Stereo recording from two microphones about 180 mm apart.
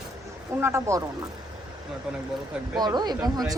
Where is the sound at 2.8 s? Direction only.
25° right (ahead or behind).